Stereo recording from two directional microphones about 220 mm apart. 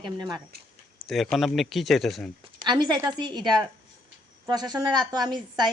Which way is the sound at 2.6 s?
20° right (ahead or behind).